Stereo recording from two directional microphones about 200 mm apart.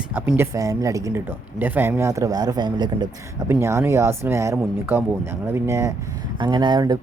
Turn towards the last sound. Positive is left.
turn(degrees=-20)  # may be behind; listen again after turning